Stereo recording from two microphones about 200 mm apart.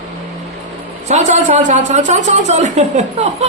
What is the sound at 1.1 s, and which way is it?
Speech, 35° right (ahead or behind).